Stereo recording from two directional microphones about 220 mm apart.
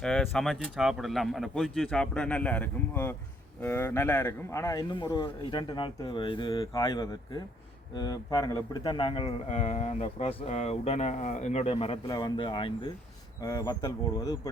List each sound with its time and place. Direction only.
0.0 s a man's voice: centre (ahead or behind)